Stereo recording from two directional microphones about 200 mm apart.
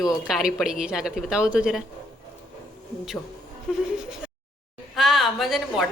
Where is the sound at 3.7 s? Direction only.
5° right (ahead or behind).